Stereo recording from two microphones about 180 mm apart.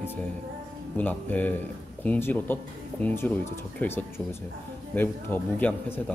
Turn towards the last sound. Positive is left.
turn(degrees=10)  # may be behind; listen again after turning